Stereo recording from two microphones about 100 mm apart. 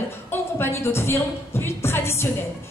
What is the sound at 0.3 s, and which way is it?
A woman's voice, 25° left (ahead or behind).